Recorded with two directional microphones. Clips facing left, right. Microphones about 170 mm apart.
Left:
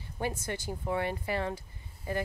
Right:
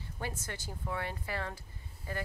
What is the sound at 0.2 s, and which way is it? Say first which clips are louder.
Speech: left 7 dB; 15° left (ahead or behind).